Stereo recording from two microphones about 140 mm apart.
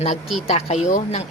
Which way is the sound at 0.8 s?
60° left (ahead or behind).